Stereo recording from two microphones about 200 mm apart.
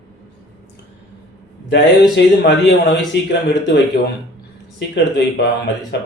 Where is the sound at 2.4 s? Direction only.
55° left (ahead or behind).